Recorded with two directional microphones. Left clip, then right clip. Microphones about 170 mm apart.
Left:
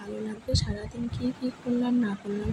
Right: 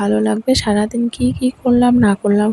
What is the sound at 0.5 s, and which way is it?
Speech, 70° right (ahead or behind).